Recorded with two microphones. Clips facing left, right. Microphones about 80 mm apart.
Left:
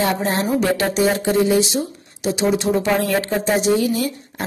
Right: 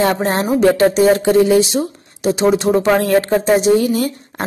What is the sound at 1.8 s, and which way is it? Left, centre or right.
Speech, right.